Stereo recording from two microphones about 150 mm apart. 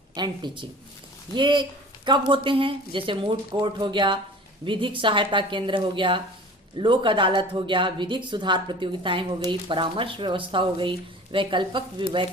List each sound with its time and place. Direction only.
0.1 s speech: 30° right (ahead or behind)